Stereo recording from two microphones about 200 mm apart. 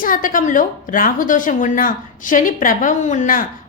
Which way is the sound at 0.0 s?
45° left (ahead or behind).